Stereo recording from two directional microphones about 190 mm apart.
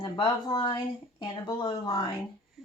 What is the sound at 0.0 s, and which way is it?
A woman's voice, 25° left (ahead or behind).